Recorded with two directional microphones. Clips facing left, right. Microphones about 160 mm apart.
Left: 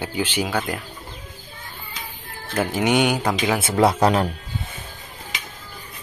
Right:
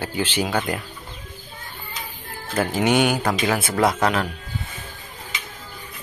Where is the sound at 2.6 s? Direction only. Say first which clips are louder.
Even; 10° left (ahead or behind).